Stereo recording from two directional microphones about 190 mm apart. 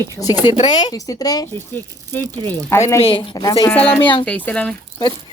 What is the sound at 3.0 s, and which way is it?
Speech, 30° left (ahead or behind).